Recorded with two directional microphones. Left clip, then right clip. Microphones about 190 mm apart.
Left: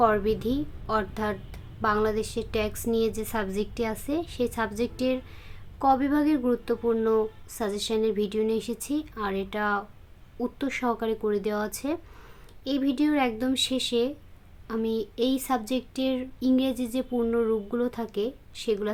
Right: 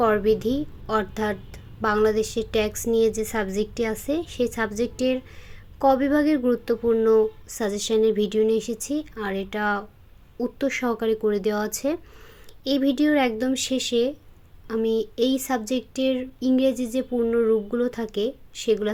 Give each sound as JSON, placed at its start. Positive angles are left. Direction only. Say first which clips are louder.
{"t": 0.0, "sound": "speech", "louder": "right 3 dB", "side_deg": -15}